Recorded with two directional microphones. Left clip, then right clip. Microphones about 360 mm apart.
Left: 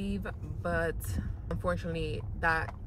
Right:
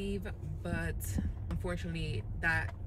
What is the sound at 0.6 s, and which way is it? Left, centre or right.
Speech, centre.